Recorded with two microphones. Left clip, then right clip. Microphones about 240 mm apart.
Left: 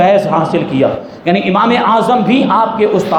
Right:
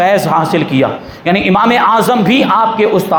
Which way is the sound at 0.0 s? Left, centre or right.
Right.